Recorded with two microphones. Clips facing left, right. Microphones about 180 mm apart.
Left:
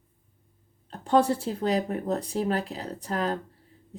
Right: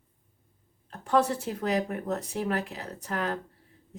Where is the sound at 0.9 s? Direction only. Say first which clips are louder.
Left 3 dB; 30° left (ahead or behind).